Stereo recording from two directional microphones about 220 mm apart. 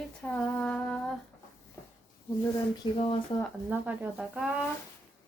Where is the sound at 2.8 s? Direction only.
25° left (ahead or behind).